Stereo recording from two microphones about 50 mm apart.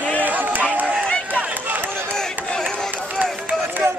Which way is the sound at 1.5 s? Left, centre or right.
Right.